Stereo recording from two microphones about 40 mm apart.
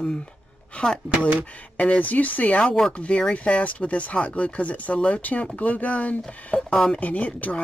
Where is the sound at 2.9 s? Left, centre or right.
Left.